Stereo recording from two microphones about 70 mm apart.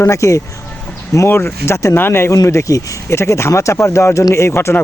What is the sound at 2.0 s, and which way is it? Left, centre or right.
Speech, left.